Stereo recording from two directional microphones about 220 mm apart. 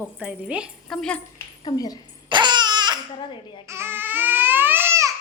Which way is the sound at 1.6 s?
15° left (ahead or behind).